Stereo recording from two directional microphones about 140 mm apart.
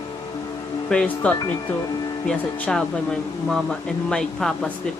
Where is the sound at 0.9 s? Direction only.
5° left (ahead or behind).